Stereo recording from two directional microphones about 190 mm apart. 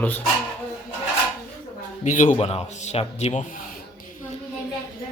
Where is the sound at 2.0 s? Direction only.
40° left (ahead or behind).